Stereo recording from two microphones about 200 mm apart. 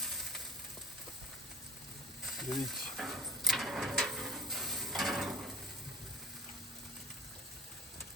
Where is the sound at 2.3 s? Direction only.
Centre (ahead or behind).